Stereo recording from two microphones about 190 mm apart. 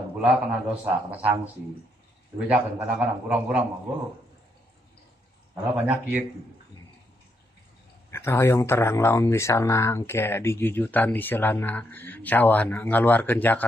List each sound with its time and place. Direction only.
0.2 s a man's voice: 5° right (ahead or behind)
5.5 s a man's voice: 5° right (ahead or behind)
8.1 s speech: 15° left (ahead or behind)